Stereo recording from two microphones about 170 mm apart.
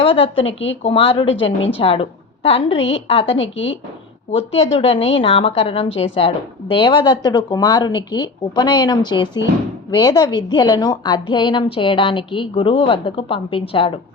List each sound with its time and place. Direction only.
0.0 s speech: 35° left (ahead or behind)
0.3 s a woman's voice: 90° left
0.9 s a woman's voice: 30° left (ahead or behind)
1.3 s a woman's voice: 90° left
1.8 s a woman's voice: 35° left (ahead or behind)
4.3 s a woman's voice: 35° left (ahead or behind)